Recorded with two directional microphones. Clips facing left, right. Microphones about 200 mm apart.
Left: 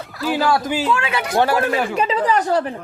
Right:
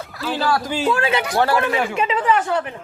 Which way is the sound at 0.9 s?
35° right (ahead or behind).